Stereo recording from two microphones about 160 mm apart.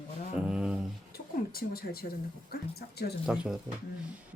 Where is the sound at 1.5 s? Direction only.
70° left (ahead or behind).